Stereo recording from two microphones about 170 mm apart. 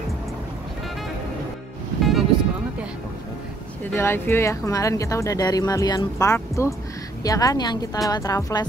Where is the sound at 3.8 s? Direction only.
15° left (ahead or behind).